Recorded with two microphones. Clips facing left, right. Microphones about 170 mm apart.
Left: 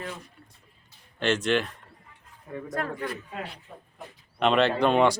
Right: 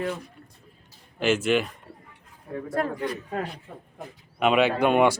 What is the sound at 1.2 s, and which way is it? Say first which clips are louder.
Speech: right 2 dB; 5° right (ahead or behind).